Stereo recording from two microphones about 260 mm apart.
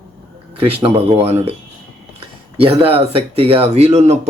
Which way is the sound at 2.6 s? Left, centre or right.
Right.